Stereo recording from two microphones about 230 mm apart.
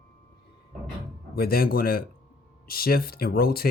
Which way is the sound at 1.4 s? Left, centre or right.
Left.